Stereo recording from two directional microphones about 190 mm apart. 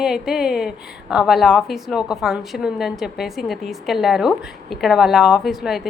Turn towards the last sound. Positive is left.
turn(degrees=0)  # may be behind; listen again after turning